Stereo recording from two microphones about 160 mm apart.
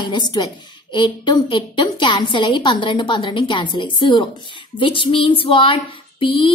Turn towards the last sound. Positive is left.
turn(degrees=35)  # may be behind; listen again after turning